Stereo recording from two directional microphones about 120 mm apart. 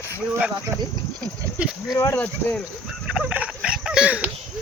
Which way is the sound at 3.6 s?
5° right (ahead or behind).